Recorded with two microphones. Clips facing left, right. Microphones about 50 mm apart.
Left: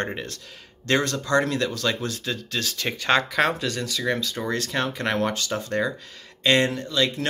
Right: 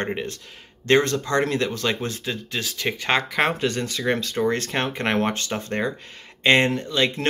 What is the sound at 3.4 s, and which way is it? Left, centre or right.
Speech, right.